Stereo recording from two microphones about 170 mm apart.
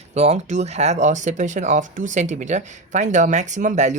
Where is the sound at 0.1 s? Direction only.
40° right (ahead or behind).